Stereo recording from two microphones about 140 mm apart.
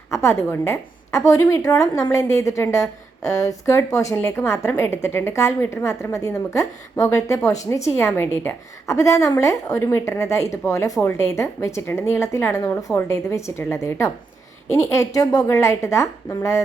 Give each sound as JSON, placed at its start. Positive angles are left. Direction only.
{"t": 0.1, "sound": "a woman's voice", "side_deg": 20}